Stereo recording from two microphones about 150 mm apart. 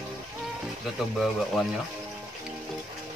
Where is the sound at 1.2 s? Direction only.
Centre (ahead or behind).